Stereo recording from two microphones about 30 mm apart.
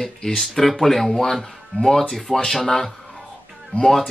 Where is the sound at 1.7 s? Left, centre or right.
Left.